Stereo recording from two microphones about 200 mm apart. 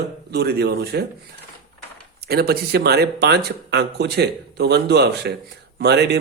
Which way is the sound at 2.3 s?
50° right (ahead or behind).